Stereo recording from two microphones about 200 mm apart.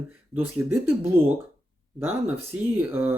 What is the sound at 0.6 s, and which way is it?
Speech, 10° right (ahead or behind).